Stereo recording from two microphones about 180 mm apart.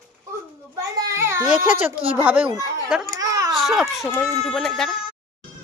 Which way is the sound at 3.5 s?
Centre (ahead or behind).